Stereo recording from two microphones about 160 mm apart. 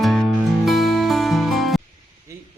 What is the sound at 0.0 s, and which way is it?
Music, centre (ahead or behind).